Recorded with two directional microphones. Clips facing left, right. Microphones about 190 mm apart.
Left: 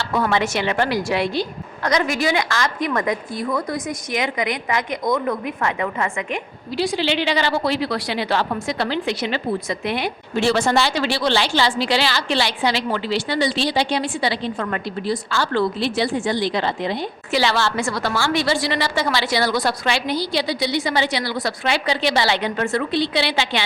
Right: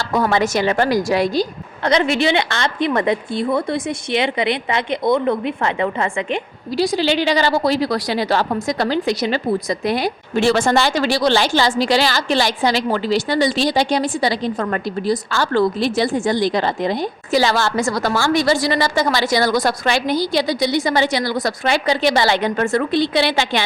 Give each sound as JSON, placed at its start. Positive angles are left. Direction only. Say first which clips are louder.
{"t": 0.0, "sound": "a woman's voice", "louder": "right 3 dB", "side_deg": -40}
{"t": 10.3, "sound": "a woman's voice", "louder": "right 2 dB", "side_deg": -50}